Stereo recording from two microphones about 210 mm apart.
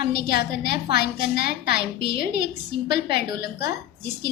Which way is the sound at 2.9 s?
50° left (ahead or behind).